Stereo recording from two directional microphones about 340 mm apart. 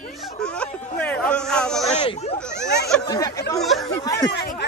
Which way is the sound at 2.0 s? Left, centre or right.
Centre.